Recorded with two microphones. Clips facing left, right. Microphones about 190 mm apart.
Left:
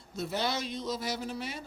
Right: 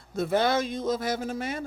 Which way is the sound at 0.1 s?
55° right (ahead or behind).